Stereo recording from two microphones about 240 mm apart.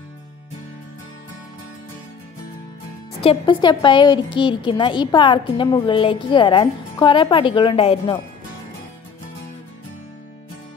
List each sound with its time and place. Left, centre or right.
3.2 s a woman's voice: left